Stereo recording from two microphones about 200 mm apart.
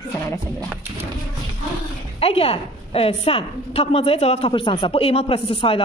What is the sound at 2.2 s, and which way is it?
A woman's voice, 30° left (ahead or behind).